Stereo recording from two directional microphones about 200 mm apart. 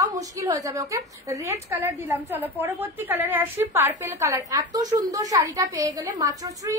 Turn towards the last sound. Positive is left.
turn(degrees=-15)  # may be behind; listen again after turning